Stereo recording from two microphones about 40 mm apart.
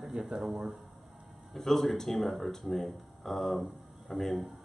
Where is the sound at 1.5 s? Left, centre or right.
Centre.